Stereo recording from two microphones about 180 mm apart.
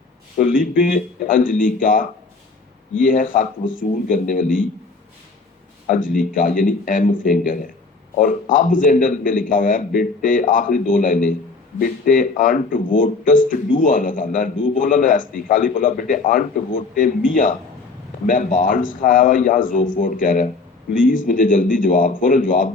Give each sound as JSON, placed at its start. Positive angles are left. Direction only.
{"t": 0.3, "sound": "a man's voice", "side_deg": 50}
{"t": 6.1, "sound": "a man's voice", "side_deg": 50}
{"t": 18.3, "sound": "a man's voice", "side_deg": 45}